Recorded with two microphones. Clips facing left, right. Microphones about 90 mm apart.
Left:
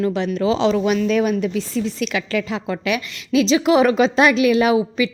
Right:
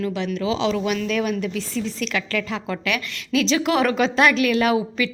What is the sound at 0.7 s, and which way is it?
A woman's voice, 25° left (ahead or behind).